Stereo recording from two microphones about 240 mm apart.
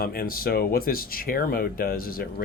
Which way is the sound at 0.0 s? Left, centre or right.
Left.